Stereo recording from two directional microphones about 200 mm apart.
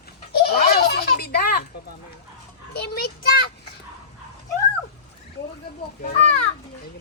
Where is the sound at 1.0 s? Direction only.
55° left (ahead or behind).